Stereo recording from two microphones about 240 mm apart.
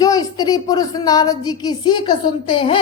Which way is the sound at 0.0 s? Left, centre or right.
Centre.